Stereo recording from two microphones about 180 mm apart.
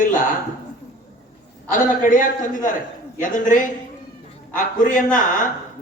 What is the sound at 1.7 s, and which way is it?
A man's voice, 45° left (ahead or behind).